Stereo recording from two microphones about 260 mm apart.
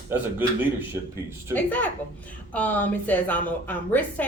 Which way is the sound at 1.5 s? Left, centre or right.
Centre.